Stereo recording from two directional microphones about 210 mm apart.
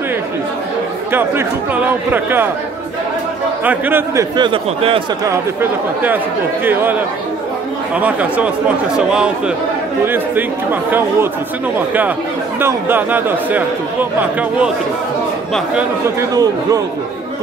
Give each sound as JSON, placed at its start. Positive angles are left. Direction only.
{"t": 1.1, "sound": "speech", "side_deg": -10}
{"t": 3.6, "sound": "a man's voice", "side_deg": -10}
{"t": 5.3, "sound": "speech", "side_deg": -10}
{"t": 12.5, "sound": "speech", "side_deg": -10}
{"t": 16.2, "sound": "speech", "side_deg": -15}